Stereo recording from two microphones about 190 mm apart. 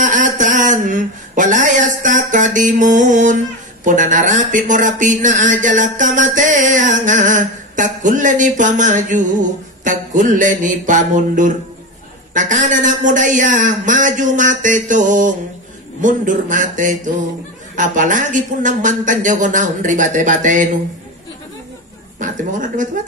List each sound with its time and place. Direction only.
0.0 s a sound: 40° right (ahead or behind)
3.8 s speech: 40° right (ahead or behind)
22.2 s speech: 40° right (ahead or behind)